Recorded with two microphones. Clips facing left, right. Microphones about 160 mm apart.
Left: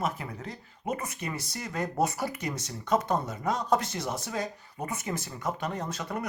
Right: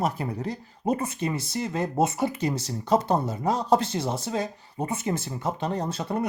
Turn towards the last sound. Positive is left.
turn(degrees=-30)  # may be behind; listen again after turning